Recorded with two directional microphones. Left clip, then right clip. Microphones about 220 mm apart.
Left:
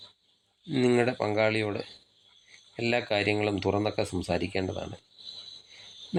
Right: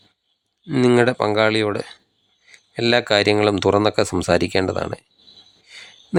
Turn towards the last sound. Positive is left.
turn(degrees=-30)  # may be behind; listen again after turning